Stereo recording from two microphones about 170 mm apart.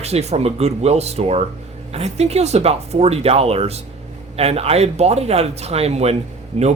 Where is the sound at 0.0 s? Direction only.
40° right (ahead or behind).